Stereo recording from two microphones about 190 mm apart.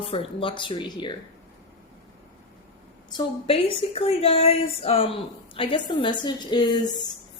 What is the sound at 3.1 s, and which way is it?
Speech, 20° left (ahead or behind).